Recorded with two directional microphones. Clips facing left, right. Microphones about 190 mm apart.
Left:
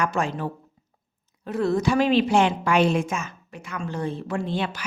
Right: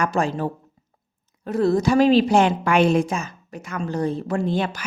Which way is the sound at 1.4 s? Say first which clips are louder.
Right 3 dB; 40° right (ahead or behind).